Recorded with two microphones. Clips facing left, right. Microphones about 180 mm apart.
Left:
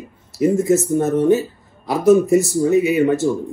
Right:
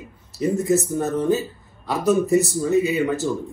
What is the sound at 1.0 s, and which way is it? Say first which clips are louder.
Speech: left 5 dB; 20° left (ahead or behind).